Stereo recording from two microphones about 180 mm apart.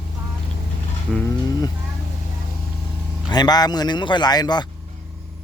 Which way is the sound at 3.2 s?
25° left (ahead or behind).